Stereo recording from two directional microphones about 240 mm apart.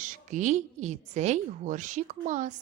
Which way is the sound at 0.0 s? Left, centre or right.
Right.